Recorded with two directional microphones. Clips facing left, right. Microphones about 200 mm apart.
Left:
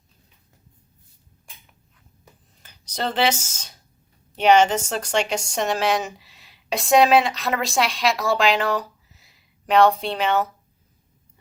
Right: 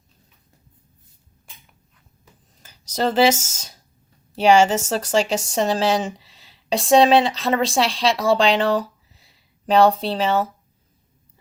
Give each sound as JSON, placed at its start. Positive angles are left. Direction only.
{"t": 2.6, "sound": "speech", "side_deg": -40}
{"t": 4.9, "sound": "speech", "side_deg": -35}
{"t": 5.3, "sound": "speech", "side_deg": 0}
{"t": 5.5, "sound": "speech", "side_deg": -30}